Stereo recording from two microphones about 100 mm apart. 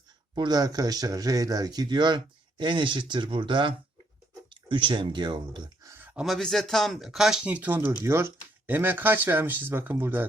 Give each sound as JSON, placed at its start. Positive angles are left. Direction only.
{"t": 0.3, "sound": "speech", "side_deg": -45}
{"t": 6.2, "sound": "speech", "side_deg": 5}
{"t": 8.0, "sound": "speech", "side_deg": -25}